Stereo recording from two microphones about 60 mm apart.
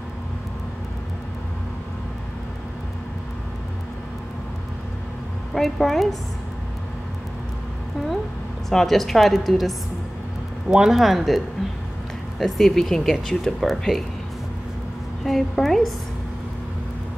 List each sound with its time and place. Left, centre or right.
5.5 s speech: centre
8.6 s speech: centre
15.2 s speech: centre